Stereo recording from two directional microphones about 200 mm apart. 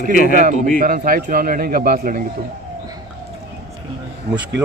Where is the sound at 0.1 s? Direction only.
45° left (ahead or behind).